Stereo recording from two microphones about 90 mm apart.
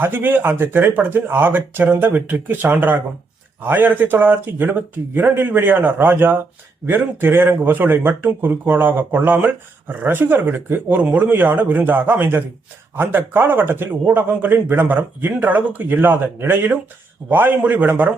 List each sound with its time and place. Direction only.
0.0 s speech: 20° right (ahead or behind)